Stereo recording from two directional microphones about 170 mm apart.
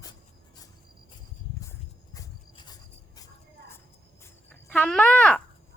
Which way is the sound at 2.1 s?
25° left (ahead or behind).